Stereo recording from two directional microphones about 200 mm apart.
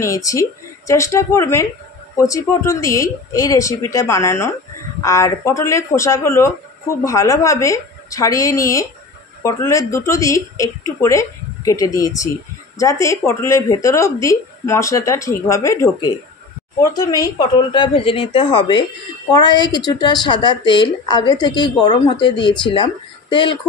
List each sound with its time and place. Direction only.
0.0 s a woman's voice: 15° left (ahead or behind)